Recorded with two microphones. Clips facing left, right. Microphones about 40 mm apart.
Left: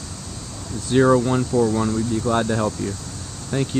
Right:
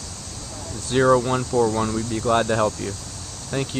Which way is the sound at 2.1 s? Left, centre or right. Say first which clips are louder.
Right 4 dB; right.